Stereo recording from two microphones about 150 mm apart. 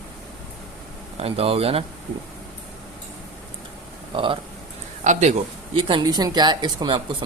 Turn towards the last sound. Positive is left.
turn(degrees=-35)  # may be behind; listen again after turning